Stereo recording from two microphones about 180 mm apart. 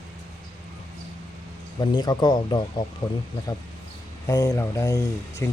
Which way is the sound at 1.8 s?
25° left (ahead or behind).